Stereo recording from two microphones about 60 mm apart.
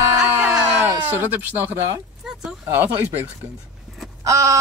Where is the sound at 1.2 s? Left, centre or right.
Right.